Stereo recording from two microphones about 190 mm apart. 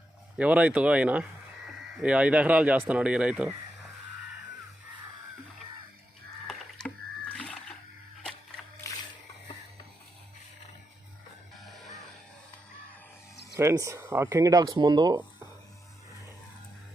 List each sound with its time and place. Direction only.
0.3 s speech: 5° right (ahead or behind)
6.5 s a sound: 5° left (ahead or behind)
13.6 s speech: 15° right (ahead or behind)